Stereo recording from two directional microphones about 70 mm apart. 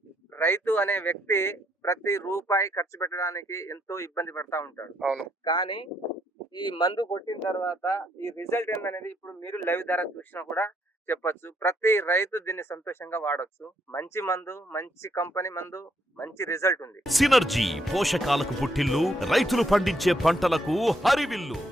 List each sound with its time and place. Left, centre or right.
0.3 s speech: left
4.9 s a man's voice: centre
6.5 s speech: left
7.9 s speech: left
17.0 s speech: centre